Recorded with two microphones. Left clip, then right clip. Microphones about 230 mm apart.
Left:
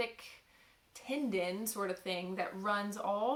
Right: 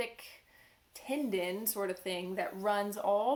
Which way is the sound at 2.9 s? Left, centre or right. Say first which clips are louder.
Right 4 dB; left.